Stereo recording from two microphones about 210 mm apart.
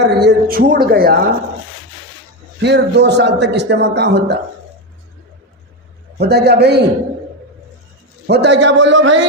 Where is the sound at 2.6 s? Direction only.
55° right (ahead or behind).